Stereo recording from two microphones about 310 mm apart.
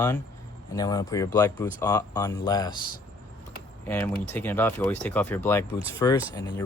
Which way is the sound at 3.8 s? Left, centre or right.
Centre.